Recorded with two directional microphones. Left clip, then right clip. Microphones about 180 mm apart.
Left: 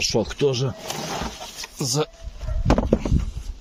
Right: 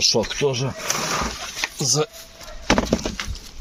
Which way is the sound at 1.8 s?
20° left (ahead or behind).